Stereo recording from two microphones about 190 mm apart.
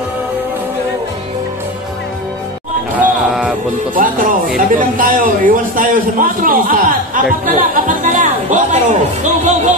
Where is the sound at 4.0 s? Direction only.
45° right (ahead or behind).